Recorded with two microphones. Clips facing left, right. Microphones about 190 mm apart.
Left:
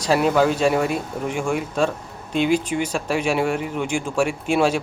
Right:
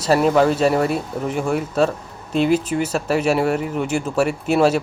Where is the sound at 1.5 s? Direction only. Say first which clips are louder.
Right 4 dB; 40° right (ahead or behind).